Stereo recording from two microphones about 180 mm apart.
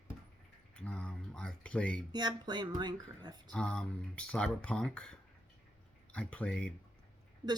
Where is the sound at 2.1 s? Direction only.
25° right (ahead or behind).